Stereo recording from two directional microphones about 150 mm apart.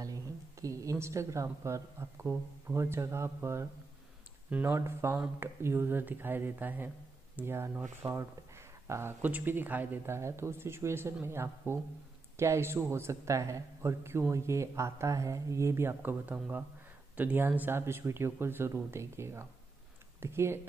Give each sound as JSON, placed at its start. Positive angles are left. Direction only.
{"t": 0.0, "sound": "a man's voice", "side_deg": -20}